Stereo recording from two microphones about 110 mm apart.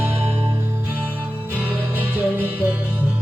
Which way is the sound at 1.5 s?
15° right (ahead or behind).